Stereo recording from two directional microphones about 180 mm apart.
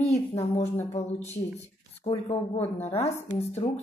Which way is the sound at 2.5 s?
35° left (ahead or behind).